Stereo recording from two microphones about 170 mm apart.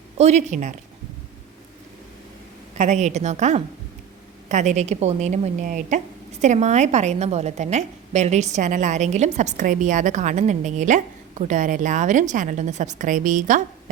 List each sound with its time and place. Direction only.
0.2 s a woman's voice: 40° right (ahead or behind)
2.7 s a woman's voice: 45° right (ahead or behind)